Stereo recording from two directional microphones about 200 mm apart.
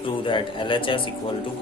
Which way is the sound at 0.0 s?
25° left (ahead or behind).